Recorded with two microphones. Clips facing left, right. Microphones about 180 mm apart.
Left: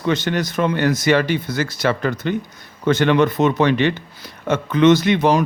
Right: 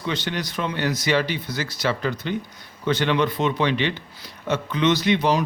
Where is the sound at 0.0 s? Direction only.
50° left (ahead or behind).